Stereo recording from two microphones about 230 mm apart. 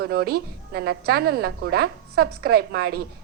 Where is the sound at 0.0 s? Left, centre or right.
Right.